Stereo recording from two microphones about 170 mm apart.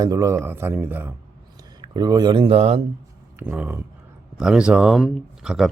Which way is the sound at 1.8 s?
25° right (ahead or behind).